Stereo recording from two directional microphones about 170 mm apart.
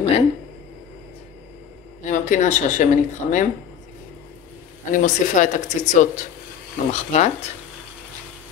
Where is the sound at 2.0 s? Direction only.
45° left (ahead or behind).